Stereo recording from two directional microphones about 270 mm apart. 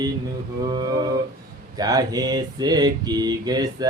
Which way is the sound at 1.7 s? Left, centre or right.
Centre.